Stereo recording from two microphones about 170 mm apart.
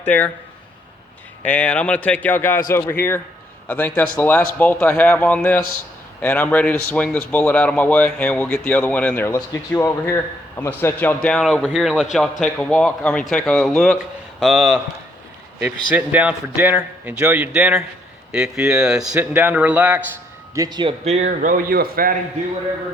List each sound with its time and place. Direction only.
0.0 s speech: 10° left (ahead or behind)
1.5 s a man's voice: 10° left (ahead or behind); by 20.0 s 10° right (ahead or behind)
20.6 s speech: 25° right (ahead or behind)
21.0 s speech: 40° right (ahead or behind)
21.2 s a man's voice: 55° right (ahead or behind)